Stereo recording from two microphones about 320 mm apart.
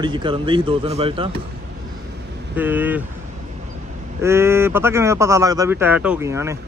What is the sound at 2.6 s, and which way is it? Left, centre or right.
Speech, centre.